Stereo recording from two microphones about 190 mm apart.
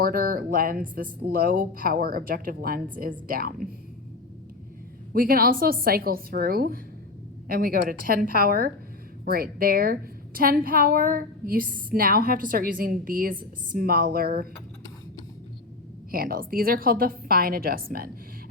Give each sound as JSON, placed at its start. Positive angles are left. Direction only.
{"t": 0.0, "sound": "a woman's voice", "side_deg": -50}
{"t": 5.1, "sound": "a woman's voice", "side_deg": -50}
{"t": 16.1, "sound": "a woman's voice", "side_deg": -50}